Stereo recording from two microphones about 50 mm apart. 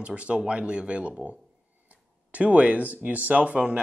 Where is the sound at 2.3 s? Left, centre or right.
Right.